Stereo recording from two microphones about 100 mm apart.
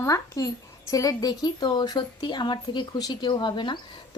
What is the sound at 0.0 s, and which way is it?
A woman's voice, 35° left (ahead or behind).